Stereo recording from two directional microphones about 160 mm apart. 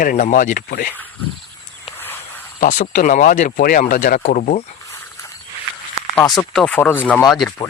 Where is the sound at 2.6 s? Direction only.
55° left (ahead or behind).